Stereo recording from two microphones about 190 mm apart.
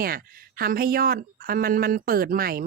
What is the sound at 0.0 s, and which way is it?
Speech, 50° right (ahead or behind).